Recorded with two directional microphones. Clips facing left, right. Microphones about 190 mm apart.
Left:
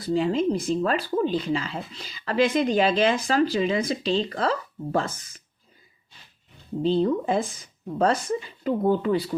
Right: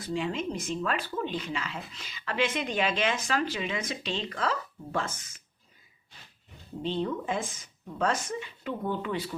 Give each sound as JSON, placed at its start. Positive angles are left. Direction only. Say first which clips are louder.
{"t": 0.0, "sound": "speech", "louder": "left 8 dB", "side_deg": 35}
{"t": 6.8, "sound": "speech", "louder": "left 8 dB", "side_deg": 35}